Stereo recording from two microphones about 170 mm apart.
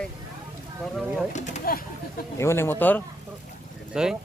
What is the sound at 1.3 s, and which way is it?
Speech, 45° left (ahead or behind).